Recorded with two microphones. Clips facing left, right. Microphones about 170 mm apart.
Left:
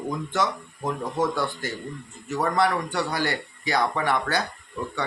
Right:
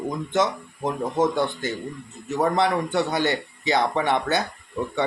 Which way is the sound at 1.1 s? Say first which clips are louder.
Right 4 dB; 20° right (ahead or behind).